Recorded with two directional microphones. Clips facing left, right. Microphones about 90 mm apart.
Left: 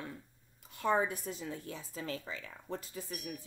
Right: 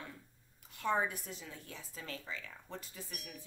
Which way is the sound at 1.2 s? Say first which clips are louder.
Left 8 dB; 40° left (ahead or behind).